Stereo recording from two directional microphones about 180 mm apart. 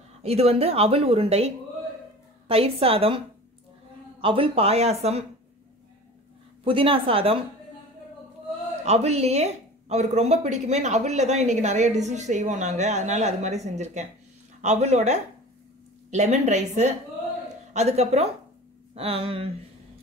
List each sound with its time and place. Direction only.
0.2 s a woman's voice: 35° right (ahead or behind)
4.2 s a woman's voice: 30° right (ahead or behind)
6.6 s a woman's voice: 30° right (ahead or behind)
8.8 s a woman's voice: 35° right (ahead or behind)